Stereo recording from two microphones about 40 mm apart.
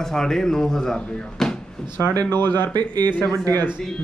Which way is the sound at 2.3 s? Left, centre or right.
Left.